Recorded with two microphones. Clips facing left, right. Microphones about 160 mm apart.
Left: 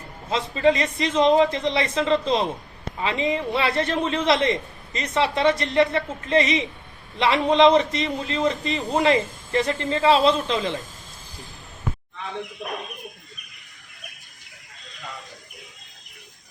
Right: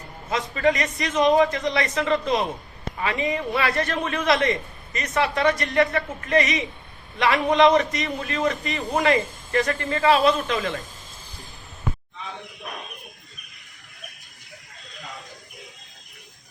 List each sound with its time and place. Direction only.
0.3 s a man's voice: 25° left (ahead or behind)